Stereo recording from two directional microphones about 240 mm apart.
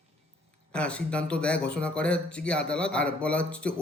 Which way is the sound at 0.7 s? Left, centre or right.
Centre.